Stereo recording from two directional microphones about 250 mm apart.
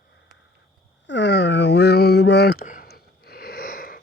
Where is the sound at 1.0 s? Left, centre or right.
Left.